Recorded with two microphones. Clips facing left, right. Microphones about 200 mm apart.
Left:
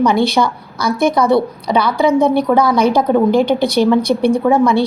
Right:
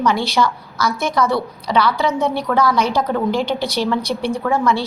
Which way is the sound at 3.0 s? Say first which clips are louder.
Left 6 dB; 15° left (ahead or behind).